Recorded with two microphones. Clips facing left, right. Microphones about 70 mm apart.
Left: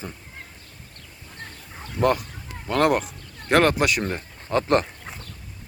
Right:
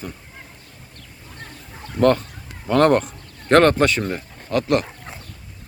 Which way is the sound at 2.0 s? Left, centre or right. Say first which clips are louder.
Right 5 dB; centre.